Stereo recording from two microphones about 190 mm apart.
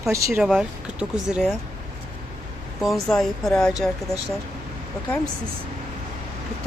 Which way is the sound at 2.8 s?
Centre (ahead or behind).